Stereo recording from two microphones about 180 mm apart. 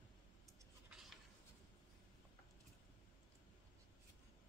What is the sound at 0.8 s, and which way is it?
Writing, centre (ahead or behind).